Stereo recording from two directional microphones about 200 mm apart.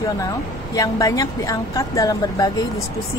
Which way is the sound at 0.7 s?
15° left (ahead or behind).